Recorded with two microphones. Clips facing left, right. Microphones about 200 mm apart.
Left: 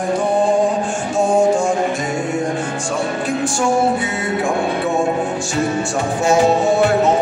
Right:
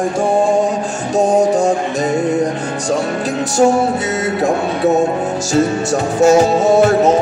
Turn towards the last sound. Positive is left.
turn(degrees=-40)  # may be behind; listen again after turning